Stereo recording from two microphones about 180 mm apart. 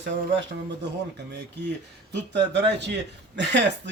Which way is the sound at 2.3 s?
75° right (ahead or behind).